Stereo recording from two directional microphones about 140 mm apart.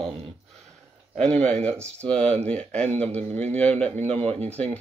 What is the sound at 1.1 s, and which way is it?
Speech, 5° left (ahead or behind).